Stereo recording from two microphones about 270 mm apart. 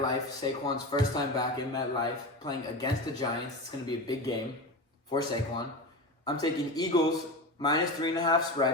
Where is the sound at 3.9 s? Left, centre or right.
Centre.